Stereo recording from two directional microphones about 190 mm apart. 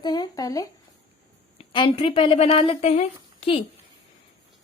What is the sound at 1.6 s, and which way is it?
Speech, 30° left (ahead or behind).